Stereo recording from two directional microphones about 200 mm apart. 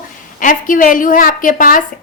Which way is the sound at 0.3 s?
40° left (ahead or behind).